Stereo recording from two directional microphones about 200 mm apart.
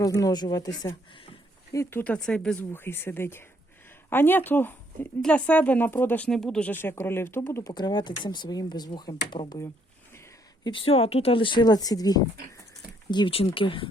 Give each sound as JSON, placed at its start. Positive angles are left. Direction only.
{"t": 0.0, "sound": "speech", "side_deg": 20}
{"t": 1.7, "sound": "speech", "side_deg": 10}
{"t": 10.6, "sound": "speech", "side_deg": 25}